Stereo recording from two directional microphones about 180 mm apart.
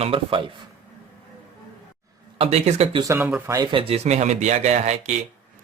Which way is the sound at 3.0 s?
15° right (ahead or behind).